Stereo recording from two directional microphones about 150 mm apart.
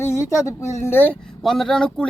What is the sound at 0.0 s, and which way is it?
Speech, 15° left (ahead or behind).